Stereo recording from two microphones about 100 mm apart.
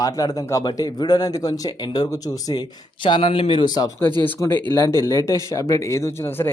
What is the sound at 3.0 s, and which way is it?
Speech, 55° left (ahead or behind).